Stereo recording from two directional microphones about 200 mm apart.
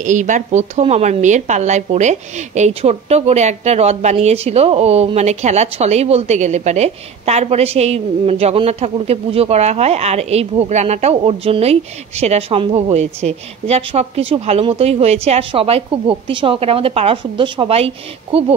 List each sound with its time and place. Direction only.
0.0 s a woman's voice: 40° right (ahead or behind)